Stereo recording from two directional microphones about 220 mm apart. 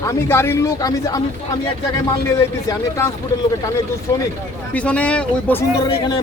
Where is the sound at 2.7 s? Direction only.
15° left (ahead or behind).